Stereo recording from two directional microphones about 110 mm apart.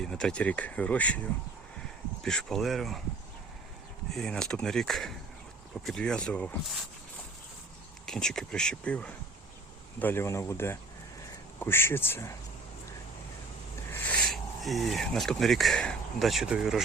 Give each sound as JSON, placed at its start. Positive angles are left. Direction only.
{"t": 0.0, "sound": "speech", "side_deg": 5}
{"t": 4.1, "sound": "speech", "side_deg": 5}
{"t": 8.0, "sound": "speech", "side_deg": 5}
{"t": 14.2, "sound": "speech", "side_deg": 0}